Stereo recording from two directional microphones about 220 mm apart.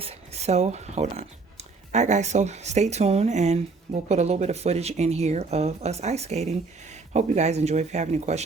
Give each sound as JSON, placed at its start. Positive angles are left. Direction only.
{"t": 0.0, "sound": "speech", "side_deg": -30}